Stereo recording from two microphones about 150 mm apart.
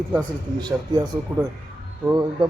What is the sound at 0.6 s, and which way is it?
Speech, 30° right (ahead or behind).